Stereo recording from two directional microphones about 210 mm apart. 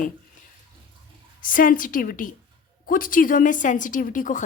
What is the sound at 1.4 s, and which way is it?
A woman's voice, 40° left (ahead or behind).